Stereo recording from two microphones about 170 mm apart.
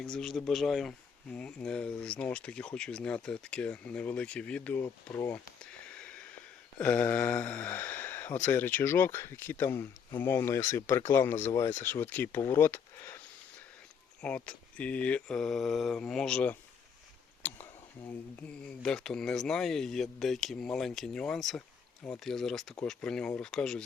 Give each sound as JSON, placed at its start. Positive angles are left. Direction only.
{"t": 0.0, "sound": "speech", "side_deg": 5}
{"t": 5.9, "sound": "a sound", "side_deg": 5}
{"t": 6.7, "sound": "speech", "side_deg": 10}
{"t": 14.2, "sound": "speech", "side_deg": 5}
{"t": 18.3, "sound": "speech", "side_deg": 5}